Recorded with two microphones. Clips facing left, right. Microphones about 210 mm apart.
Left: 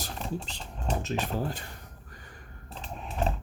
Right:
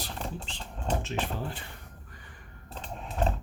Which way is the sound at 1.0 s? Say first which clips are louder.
Left 3 dB; 40° left (ahead or behind).